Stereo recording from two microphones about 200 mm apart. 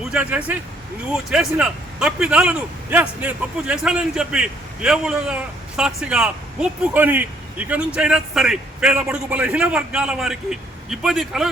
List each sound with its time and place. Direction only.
0.1 s speech: 5° right (ahead or behind)